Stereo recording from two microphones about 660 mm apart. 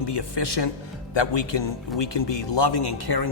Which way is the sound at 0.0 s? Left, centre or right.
Left.